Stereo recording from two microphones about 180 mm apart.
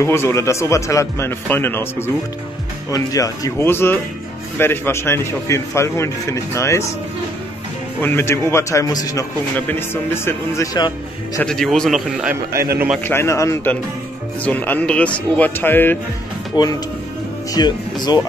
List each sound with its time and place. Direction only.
0.0 s a man's voice: 15° left (ahead or behind)
8.0 s a man's voice: 10° left (ahead or behind)
11.4 s a man's voice: 5° left (ahead or behind)
13.0 s a man's voice: 15° left (ahead or behind)
16.5 s speech: 25° left (ahead or behind)